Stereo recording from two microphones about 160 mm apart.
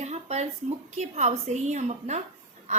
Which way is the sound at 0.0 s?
45° right (ahead or behind).